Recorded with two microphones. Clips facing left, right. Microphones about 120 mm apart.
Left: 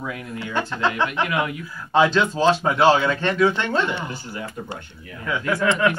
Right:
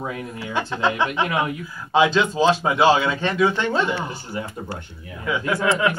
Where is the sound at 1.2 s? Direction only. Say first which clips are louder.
Right 1 dB; 30° right (ahead or behind).